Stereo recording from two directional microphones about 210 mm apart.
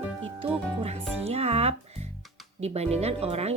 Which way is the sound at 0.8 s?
30° right (ahead or behind).